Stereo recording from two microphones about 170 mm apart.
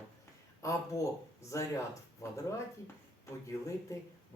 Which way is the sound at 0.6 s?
20° left (ahead or behind).